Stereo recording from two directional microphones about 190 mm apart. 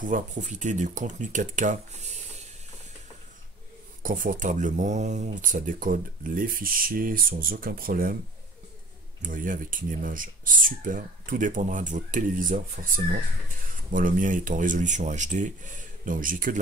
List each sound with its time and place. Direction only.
0.0 s speech: 40° right (ahead or behind)
4.0 s speech: 45° right (ahead or behind)
9.2 s speech: 45° right (ahead or behind)